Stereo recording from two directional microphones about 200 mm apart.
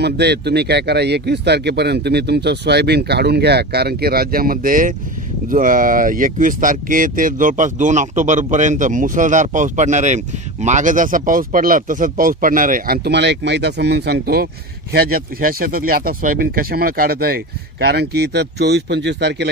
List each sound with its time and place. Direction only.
0.0 s speech: 55° right (ahead or behind)